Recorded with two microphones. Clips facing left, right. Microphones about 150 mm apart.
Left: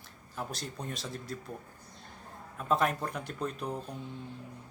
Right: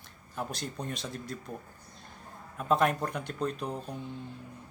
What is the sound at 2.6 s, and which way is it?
Speech, centre (ahead or behind).